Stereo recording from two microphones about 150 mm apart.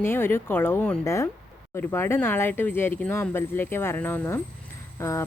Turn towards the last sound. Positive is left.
turn(degrees=20)  # may be behind; listen again after turning